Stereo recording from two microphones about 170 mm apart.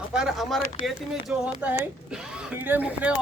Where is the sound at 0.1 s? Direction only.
Centre (ahead or behind).